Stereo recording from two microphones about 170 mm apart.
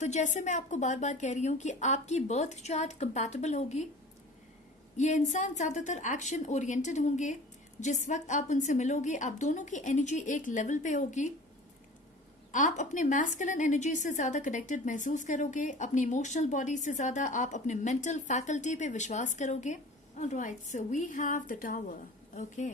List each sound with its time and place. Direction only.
0.0 s a woman's voice: 45° left (ahead or behind)
4.9 s a woman's voice: 45° left (ahead or behind)
12.5 s a woman's voice: 45° left (ahead or behind)